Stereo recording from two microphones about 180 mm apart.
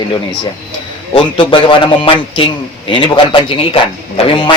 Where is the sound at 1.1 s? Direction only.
30° left (ahead or behind).